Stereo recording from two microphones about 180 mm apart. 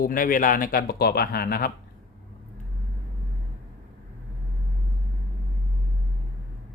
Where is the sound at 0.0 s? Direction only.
50° left (ahead or behind).